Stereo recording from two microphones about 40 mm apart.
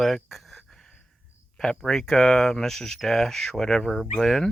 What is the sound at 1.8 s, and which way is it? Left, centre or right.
Speech, centre.